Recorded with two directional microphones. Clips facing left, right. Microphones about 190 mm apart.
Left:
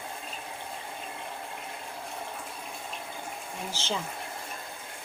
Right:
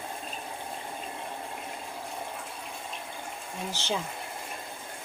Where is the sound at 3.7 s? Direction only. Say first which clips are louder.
Right 2 dB; 15° right (ahead or behind).